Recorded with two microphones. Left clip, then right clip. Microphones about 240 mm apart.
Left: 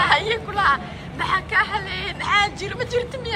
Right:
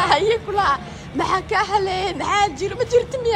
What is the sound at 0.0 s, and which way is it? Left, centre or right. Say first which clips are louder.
A man's voice: right 2 dB; centre.